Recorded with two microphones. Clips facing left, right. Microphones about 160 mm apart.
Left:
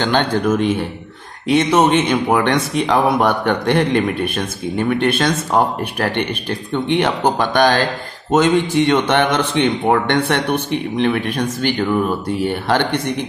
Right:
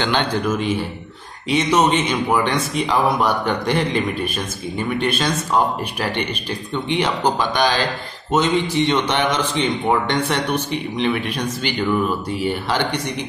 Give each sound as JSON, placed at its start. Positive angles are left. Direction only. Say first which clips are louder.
{"t": 0.0, "sound": "speech", "louder": "left 3 dB", "side_deg": 45}